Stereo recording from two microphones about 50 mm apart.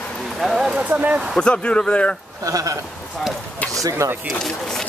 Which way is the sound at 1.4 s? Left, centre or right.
Left.